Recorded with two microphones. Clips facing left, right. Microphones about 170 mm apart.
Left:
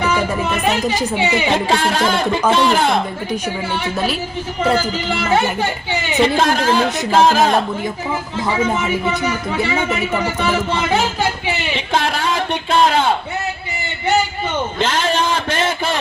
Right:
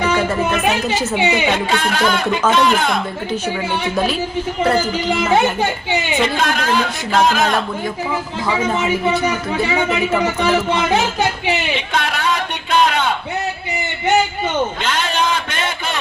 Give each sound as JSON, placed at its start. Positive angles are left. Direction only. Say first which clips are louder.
{"t": 0.0, "sound": "speech", "louder": "right 1 dB", "side_deg": -15}
{"t": 1.7, "sound": "speech", "louder": "left 1 dB", "side_deg": 30}
{"t": 6.2, "sound": "speech", "louder": "left 3 dB", "side_deg": 30}
{"t": 10.4, "sound": "speech", "louder": "right 2 dB", "side_deg": -15}
{"t": 11.9, "sound": "a sound", "louder": "left 2 dB", "side_deg": 30}
{"t": 14.8, "sound": "a sound", "louder": "left 2 dB", "side_deg": 30}